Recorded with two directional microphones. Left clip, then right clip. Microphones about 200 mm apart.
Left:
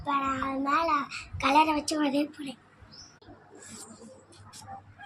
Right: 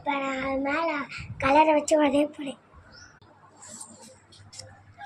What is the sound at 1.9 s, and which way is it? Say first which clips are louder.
Speech: right 7 dB; centre (ahead or behind).